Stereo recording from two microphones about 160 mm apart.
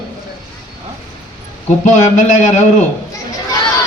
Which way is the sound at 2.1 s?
50° left (ahead or behind).